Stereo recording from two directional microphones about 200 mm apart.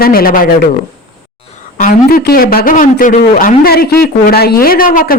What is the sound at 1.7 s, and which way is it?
A man's voice, 45° left (ahead or behind).